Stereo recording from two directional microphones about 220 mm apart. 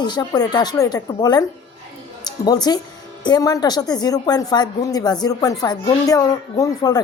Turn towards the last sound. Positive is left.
turn(degrees=15)  # may be behind; listen again after turning